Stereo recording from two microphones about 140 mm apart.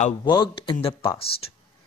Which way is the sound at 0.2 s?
30° left (ahead or behind).